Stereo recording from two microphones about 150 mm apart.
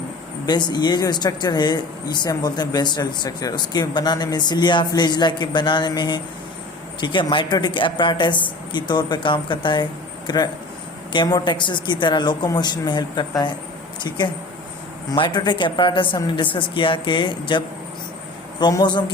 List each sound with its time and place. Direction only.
0.4 s speech: 30° left (ahead or behind)
15.1 s speech: 30° left (ahead or behind)
18.6 s speech: 30° left (ahead or behind)